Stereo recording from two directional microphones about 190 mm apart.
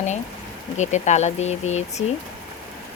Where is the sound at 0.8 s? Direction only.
40° left (ahead or behind).